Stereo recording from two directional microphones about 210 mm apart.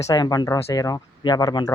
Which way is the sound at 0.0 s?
20° left (ahead or behind).